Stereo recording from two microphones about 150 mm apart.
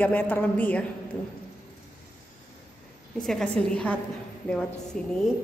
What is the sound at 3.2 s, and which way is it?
Speech, 5° left (ahead or behind).